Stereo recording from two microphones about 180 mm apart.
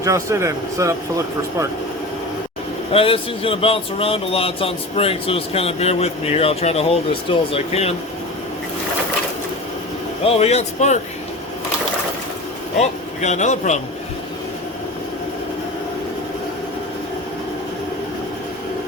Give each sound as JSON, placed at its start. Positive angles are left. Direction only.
{"t": 0.0, "sound": "speech", "side_deg": -15}
{"t": 2.9, "sound": "speech", "side_deg": 30}
{"t": 10.2, "sound": "speech", "side_deg": 35}
{"t": 13.2, "sound": "speech", "side_deg": 40}